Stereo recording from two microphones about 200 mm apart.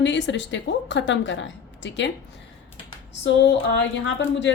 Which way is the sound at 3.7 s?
65° left (ahead or behind).